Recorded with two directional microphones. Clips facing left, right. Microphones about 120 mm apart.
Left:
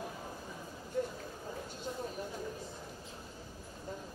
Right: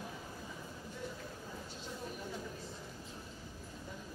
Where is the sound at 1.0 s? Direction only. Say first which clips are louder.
Left 11 dB; 50° left (ahead or behind).